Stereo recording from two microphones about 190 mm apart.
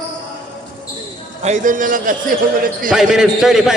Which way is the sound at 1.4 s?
40° right (ahead or behind).